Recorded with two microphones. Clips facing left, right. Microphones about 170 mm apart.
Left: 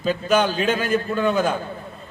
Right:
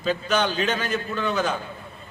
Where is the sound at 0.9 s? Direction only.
45° left (ahead or behind).